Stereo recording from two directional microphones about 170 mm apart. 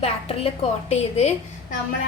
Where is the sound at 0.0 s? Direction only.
35° left (ahead or behind).